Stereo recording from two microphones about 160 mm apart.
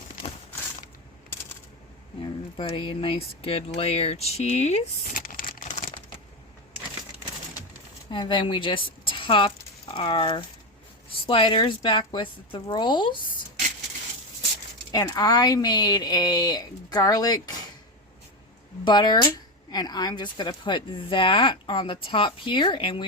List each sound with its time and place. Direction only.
2.6 s speech: 30° left (ahead or behind); by 5.6 s 60° left (ahead or behind)
5.6 s computer keyboard: 50° left (ahead or behind)
8.1 s a woman's voice: 30° left (ahead or behind)
14.9 s speech: 25° left (ahead or behind)
18.9 s speech: 30° left (ahead or behind)